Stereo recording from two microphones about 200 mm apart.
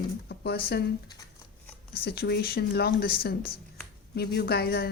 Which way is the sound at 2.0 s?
50° left (ahead or behind).